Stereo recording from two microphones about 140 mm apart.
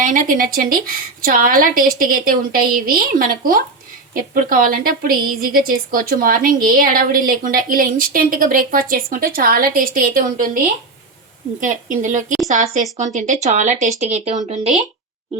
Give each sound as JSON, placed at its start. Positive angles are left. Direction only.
{"t": 0.0, "sound": "a woman's voice", "side_deg": -70}
{"t": 11.6, "sound": "a woman's voice", "side_deg": -65}